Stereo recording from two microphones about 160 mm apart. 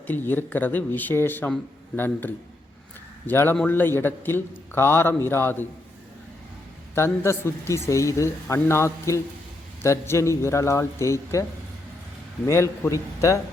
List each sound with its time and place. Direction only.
0.1 s a man's voice: 10° left (ahead or behind)
6.9 s a man's voice: 15° left (ahead or behind)
12.5 s a man's voice: 15° left (ahead or behind)